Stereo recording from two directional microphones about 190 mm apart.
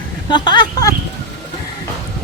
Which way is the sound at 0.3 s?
25° left (ahead or behind).